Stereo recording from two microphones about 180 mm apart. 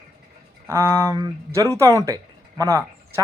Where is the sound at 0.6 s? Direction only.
15° right (ahead or behind).